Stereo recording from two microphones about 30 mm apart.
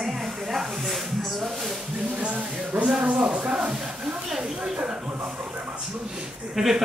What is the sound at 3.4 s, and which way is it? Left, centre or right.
Speech, right.